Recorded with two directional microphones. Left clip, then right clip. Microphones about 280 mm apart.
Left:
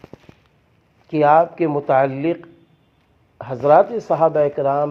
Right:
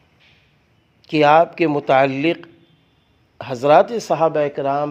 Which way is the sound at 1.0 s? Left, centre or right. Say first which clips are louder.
Right 1 dB; right.